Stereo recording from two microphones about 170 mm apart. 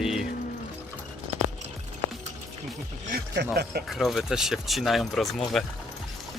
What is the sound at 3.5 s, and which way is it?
Speech, 70° right (ahead or behind).